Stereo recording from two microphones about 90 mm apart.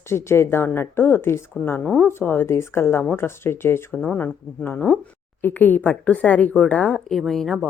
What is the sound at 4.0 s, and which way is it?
A woman's voice, 15° left (ahead or behind).